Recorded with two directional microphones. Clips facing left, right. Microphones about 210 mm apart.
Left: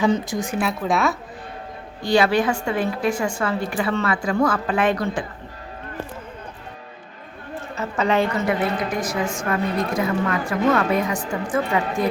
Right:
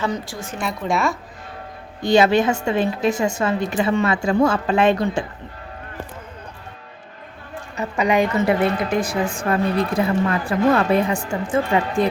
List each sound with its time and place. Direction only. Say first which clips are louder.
0.1 s a woman's voice: left 6 dB; 20° left (ahead or behind)
0.6 s a woman's voice: right 1 dB; centre (ahead or behind)
2.0 s a woman's voice: right 3 dB; 20° right (ahead or behind)
7.8 s a woman's voice: right 2 dB; 15° right (ahead or behind)
8.4 s a woman's voice: right 3 dB; 30° right (ahead or behind)